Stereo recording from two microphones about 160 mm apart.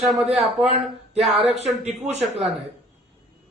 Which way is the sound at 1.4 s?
40° right (ahead or behind).